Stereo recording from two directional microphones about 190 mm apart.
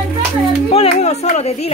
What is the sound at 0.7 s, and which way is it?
Music, 35° left (ahead or behind).